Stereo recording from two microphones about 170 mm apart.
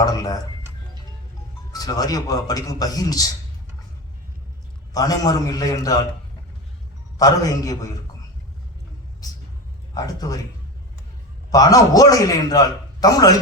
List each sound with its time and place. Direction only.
0.0 s a man's voice: 20° left (ahead or behind)
1.7 s a man's voice: 20° left (ahead or behind)
4.9 s a man's voice: 20° left (ahead or behind)
7.2 s a man's voice: 20° left (ahead or behind)
9.2 s a man's voice: 20° left (ahead or behind)
11.5 s a man's voice: 20° left (ahead or behind)